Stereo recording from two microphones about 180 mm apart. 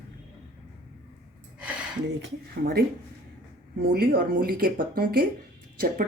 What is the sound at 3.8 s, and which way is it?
Speech, 60° right (ahead or behind).